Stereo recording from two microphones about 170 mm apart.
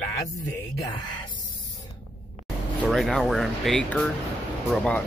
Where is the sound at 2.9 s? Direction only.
Centre (ahead or behind).